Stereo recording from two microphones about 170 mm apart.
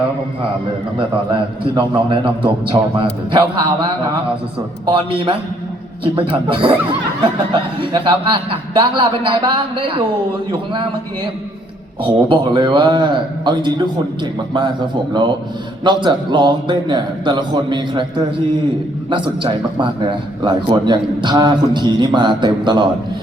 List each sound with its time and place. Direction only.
0.9 s a man's voice: 30° right (ahead or behind)
6.1 s a man's voice: 30° right (ahead or behind)
7.9 s a man's voice: 30° right (ahead or behind)
12.0 s a man's voice: 30° right (ahead or behind)
15.8 s a man's voice: 25° right (ahead or behind)